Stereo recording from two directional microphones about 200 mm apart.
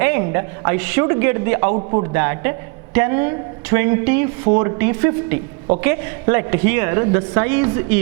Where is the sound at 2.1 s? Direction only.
15° right (ahead or behind).